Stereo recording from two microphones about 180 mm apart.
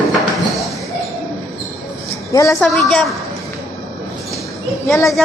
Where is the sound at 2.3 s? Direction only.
20° left (ahead or behind).